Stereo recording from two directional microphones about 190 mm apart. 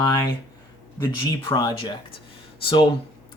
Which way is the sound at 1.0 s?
20° left (ahead or behind).